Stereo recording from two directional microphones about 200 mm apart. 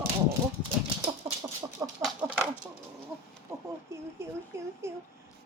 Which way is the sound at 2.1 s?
5° right (ahead or behind).